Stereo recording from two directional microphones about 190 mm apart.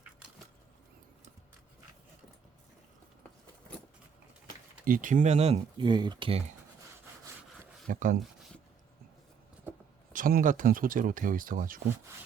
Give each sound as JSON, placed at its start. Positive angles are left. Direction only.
{"t": 4.9, "sound": "speech", "side_deg": -45}
{"t": 7.9, "sound": "speech", "side_deg": -45}
{"t": 9.7, "sound": "a sound", "side_deg": -10}
{"t": 10.1, "sound": "speech", "side_deg": -45}